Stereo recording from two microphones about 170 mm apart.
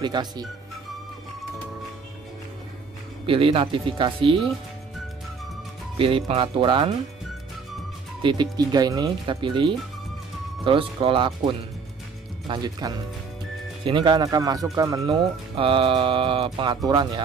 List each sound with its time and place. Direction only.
0.0 s speech: 25° right (ahead or behind)
3.3 s speech: 30° right (ahead or behind)
5.9 s speech: 30° right (ahead or behind)
8.2 s speech: 25° right (ahead or behind)